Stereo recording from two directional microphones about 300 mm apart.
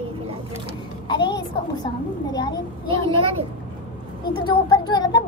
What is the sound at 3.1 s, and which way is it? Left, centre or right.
Speech, centre.